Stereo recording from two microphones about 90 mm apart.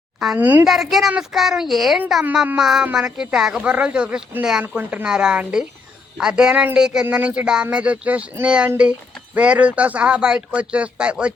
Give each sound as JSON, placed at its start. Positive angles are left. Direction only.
{"t": 0.3, "sound": "speech", "side_deg": -20}
{"t": 0.6, "sound": "a woman's voice", "side_deg": 0}
{"t": 4.8, "sound": "speech", "side_deg": -25}
{"t": 5.0, "sound": "speech", "side_deg": -10}